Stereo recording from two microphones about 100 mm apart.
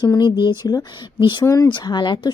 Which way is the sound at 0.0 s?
45° left (ahead or behind).